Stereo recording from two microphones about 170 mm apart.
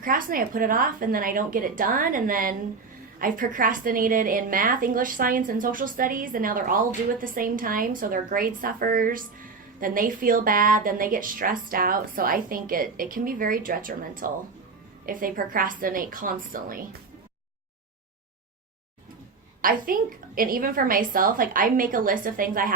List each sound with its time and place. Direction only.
0.0 s a woman's voice: 55° right (ahead or behind)
19.6 s a woman's voice: 55° right (ahead or behind)